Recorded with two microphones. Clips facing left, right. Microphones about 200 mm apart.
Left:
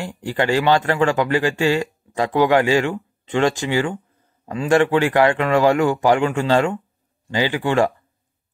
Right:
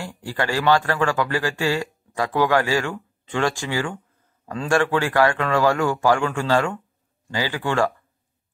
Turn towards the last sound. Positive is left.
turn(degrees=20)  # may be behind; listen again after turning